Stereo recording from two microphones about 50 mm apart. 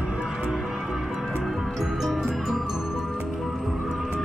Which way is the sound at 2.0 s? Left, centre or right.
Centre.